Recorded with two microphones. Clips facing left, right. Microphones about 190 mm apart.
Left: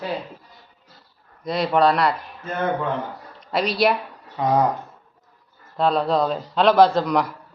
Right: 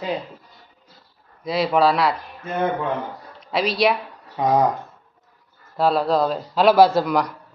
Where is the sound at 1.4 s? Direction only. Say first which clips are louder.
Even; centre (ahead or behind).